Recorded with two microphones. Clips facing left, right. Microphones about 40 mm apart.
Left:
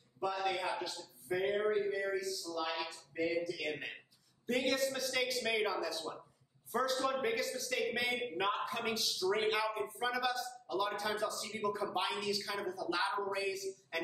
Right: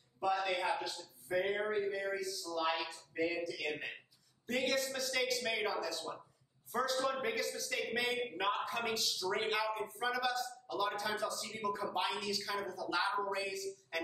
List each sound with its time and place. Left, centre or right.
0.2 s a man's voice: centre
2.4 s speech: centre
3.3 s a man's voice: centre